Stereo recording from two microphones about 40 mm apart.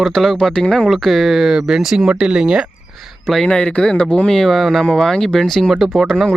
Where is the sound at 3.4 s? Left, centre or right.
Left.